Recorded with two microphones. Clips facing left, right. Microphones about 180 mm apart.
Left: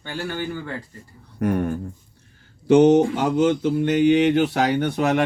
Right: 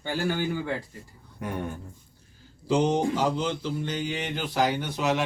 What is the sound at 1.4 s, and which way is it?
Speech, 70° left (ahead or behind).